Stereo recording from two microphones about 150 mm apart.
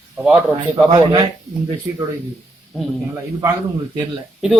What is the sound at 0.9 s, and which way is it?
Speech, 30° right (ahead or behind).